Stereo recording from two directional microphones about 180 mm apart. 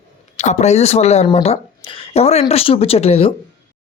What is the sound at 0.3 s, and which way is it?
Speech, 40° left (ahead or behind).